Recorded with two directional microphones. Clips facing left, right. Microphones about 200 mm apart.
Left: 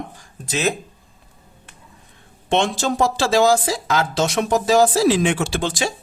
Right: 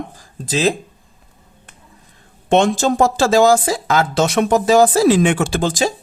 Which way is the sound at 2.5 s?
45° right (ahead or behind).